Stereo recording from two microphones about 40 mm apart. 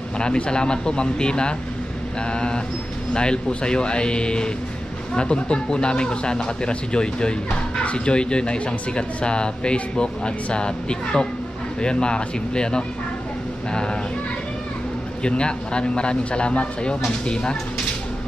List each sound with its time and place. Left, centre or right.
0.2 s speech: left
15.2 s speech: left